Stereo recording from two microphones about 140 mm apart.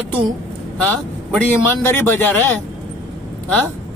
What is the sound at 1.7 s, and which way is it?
Speech, 15° left (ahead or behind).